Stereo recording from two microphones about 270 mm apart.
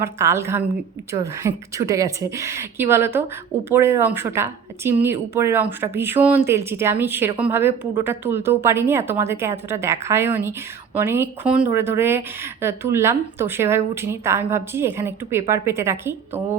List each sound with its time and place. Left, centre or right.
0.0 s speech: centre